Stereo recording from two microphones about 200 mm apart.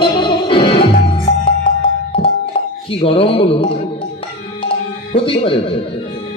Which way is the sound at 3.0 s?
30° left (ahead or behind).